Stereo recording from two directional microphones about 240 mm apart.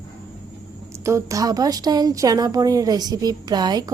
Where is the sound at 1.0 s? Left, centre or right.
Centre.